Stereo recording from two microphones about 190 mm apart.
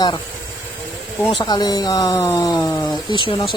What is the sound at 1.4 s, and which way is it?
Speech, 20° left (ahead or behind).